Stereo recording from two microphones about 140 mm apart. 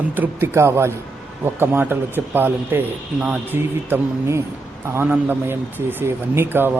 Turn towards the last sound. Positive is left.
turn(degrees=-15)  # may be behind; listen again after turning